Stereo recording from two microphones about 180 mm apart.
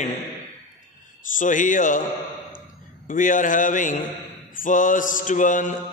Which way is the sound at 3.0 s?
45° left (ahead or behind).